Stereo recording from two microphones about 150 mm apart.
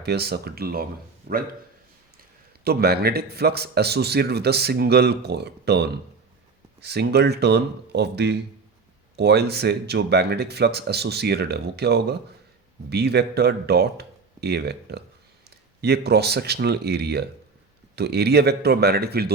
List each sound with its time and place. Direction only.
0.0 s speech: 90° right
1.3 s speech: 70° right (ahead or behind)
2.6 s speech: 90° right